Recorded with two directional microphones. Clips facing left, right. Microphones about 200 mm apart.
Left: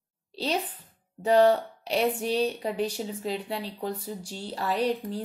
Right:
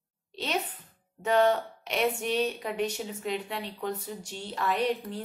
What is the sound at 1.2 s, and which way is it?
Speech, 35° left (ahead or behind).